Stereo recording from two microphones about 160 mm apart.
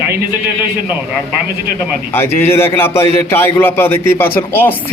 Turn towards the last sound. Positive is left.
turn(degrees=15)  # may be behind; listen again after turning